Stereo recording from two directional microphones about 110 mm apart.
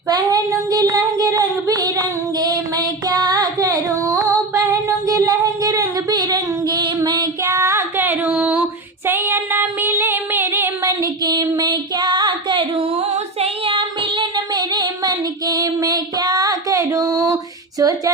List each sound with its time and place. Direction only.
0.1 s child singing: 35° right (ahead or behind); by 8.6 s 10° right (ahead or behind)
9.0 s music: 20° right (ahead or behind); by 14.4 s 50° right (ahead or behind)
14.5 s child singing: 40° right (ahead or behind)